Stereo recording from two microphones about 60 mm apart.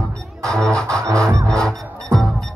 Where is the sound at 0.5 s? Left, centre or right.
Centre.